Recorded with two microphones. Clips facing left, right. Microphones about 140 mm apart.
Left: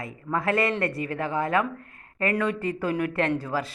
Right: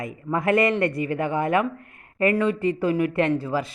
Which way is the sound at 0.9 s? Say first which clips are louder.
Right 5 dB; 40° left (ahead or behind).